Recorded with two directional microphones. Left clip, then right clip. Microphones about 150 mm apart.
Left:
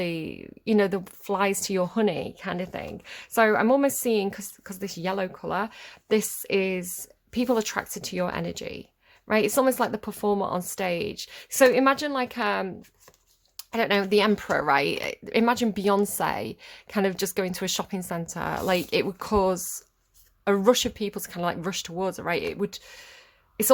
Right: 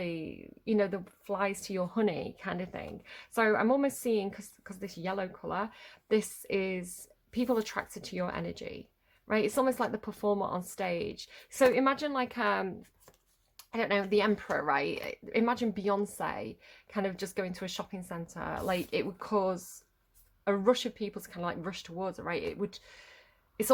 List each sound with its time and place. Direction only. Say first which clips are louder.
0.0 s a woman's voice: left 7 dB; 40° left (ahead or behind); by 12.7 s 15° left (ahead or behind)
13.6 s a woman's voice: left 6 dB; 25° left (ahead or behind)